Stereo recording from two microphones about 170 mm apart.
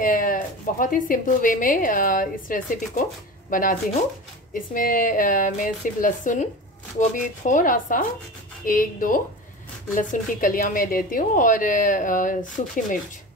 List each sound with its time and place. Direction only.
0.0 s a woman's voice: 50° left (ahead or behind)